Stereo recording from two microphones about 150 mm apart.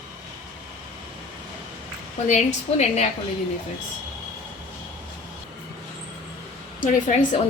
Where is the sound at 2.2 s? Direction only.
50° left (ahead or behind).